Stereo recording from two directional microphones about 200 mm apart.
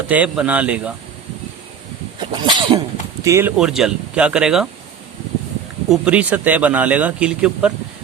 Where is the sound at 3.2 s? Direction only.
10° right (ahead or behind).